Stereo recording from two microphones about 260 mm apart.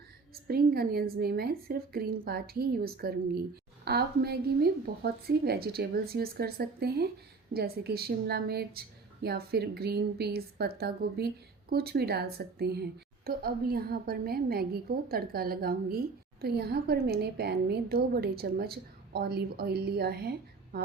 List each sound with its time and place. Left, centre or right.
0.4 s a woman's voice: right